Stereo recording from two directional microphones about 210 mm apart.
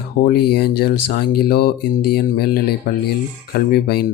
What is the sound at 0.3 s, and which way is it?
Speech, 50° left (ahead or behind).